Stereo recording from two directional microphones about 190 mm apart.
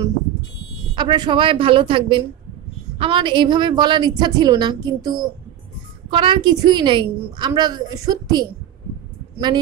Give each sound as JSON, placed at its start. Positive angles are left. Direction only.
{"t": 0.9, "sound": "a woman's voice", "side_deg": -25}